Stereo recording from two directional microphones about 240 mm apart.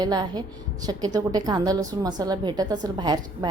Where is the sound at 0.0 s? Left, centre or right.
Centre.